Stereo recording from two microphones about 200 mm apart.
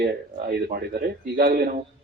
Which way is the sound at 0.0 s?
50° right (ahead or behind).